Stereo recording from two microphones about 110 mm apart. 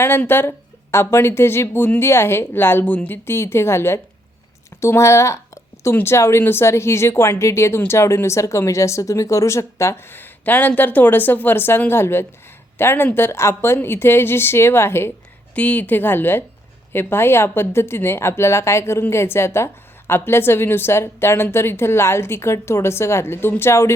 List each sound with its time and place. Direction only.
0.0 s a woman's voice: 20° left (ahead or behind)